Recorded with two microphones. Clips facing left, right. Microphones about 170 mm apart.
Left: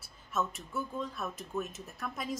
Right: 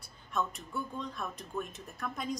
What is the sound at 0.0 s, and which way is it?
Speech, 5° left (ahead or behind).